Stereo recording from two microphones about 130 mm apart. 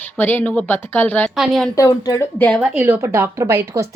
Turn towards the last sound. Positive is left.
turn(degrees=-20)  # may be behind; listen again after turning